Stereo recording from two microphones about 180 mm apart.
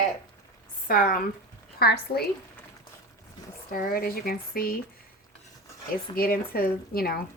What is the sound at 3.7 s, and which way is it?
Speech, 55° left (ahead or behind).